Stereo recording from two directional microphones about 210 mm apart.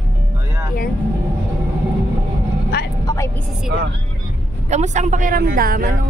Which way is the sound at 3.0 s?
15° left (ahead or behind).